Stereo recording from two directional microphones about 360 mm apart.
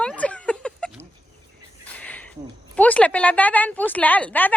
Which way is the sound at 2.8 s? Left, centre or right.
Centre.